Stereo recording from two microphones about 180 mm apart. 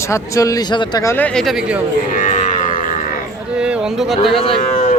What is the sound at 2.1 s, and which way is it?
Livestock, 45° left (ahead or behind).